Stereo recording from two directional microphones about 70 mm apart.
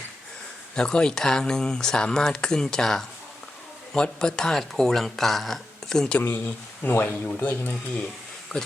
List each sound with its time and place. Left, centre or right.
0.8 s speech: centre
6.1 s speech: left
8.5 s speech: centre